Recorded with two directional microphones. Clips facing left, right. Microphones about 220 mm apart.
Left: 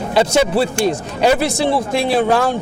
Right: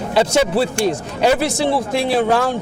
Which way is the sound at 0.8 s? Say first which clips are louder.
Left 1 dB; 15° left (ahead or behind).